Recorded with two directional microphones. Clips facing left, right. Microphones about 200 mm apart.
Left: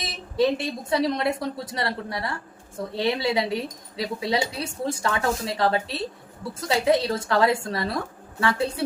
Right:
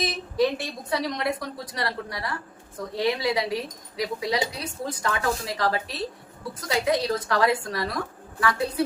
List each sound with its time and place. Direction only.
0.0 s a woman's voice: 25° left (ahead or behind)